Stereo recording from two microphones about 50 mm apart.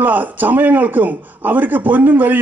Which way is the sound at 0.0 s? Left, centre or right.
Right.